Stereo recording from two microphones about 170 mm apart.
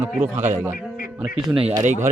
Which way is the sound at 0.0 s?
10° right (ahead or behind).